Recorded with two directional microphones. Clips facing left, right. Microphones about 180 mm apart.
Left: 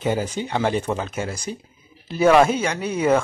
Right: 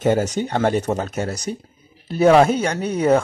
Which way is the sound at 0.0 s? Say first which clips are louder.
Right 5 dB; 45° right (ahead or behind).